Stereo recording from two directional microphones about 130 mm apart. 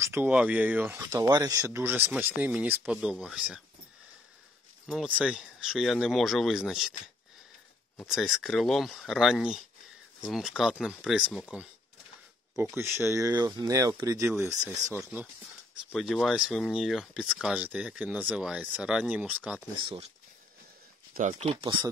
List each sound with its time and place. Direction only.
0.0 s speech: 15° right (ahead or behind)
4.8 s speech: 10° right (ahead or behind)
8.1 s speech: centre (ahead or behind)
12.7 s speech: 20° right (ahead or behind)
14.5 s speech: centre (ahead or behind)
15.9 s speech: centre (ahead or behind)
21.2 s speech: 65° right (ahead or behind)